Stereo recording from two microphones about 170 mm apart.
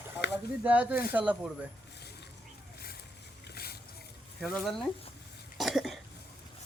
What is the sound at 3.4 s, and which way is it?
Splash, 65° left (ahead or behind).